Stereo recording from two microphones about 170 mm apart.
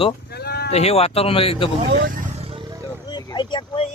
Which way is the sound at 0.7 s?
40° left (ahead or behind).